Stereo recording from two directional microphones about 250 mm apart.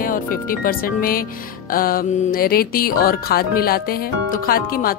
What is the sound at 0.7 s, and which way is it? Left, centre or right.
Speech, left.